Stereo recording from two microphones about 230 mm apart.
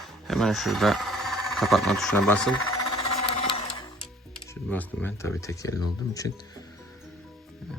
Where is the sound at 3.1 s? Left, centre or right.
Left.